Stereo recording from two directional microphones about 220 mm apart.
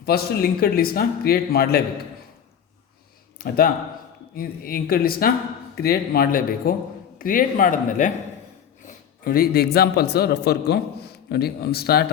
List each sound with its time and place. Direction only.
0.0 s a man's voice: 45° left (ahead or behind)
3.3 s a man's voice: 45° left (ahead or behind)
8.9 s a sound: 40° left (ahead or behind)
9.7 s a man's voice: 45° left (ahead or behind)